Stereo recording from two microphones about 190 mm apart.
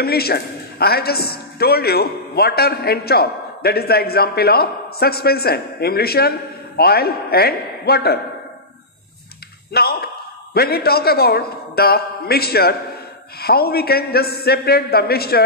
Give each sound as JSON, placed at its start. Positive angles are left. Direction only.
{"t": 0.0, "sound": "a woman's voice", "side_deg": 55}
{"t": 9.7, "sound": "a sound", "side_deg": 55}
{"t": 10.5, "sound": "a woman's voice", "side_deg": 55}